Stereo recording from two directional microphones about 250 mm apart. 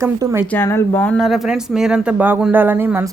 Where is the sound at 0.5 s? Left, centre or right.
Centre.